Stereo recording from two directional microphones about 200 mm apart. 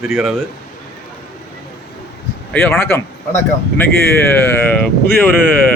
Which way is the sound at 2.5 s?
10° left (ahead or behind).